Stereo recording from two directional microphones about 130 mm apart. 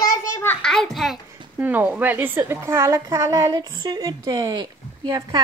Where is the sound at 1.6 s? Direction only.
15° right (ahead or behind).